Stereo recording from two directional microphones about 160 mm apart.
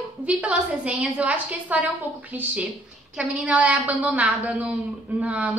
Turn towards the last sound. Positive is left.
turn(degrees=-10)  # may be behind; listen again after turning